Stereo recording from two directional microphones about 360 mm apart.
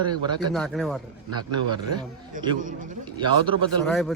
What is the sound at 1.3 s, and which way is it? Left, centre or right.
A man's voice, centre.